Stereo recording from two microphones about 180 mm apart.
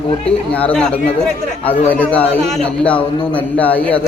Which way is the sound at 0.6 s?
5° left (ahead or behind).